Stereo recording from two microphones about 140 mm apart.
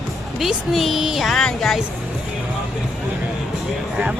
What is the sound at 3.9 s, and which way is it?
Music, 5° right (ahead or behind).